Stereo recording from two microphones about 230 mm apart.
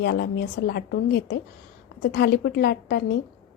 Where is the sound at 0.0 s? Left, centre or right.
Left.